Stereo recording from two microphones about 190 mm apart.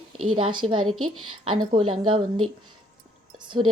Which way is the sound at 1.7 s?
25° right (ahead or behind).